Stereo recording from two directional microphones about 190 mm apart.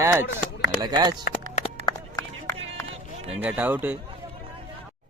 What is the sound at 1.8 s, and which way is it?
Music, 15° left (ahead or behind).